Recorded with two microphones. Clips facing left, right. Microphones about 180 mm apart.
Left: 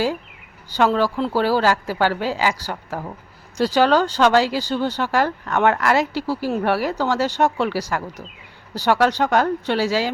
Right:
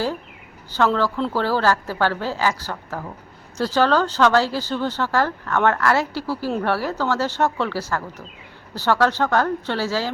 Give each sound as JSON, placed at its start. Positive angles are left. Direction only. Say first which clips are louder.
{"t": 0.7, "sound": "speech", "louder": "left 2 dB", "side_deg": 10}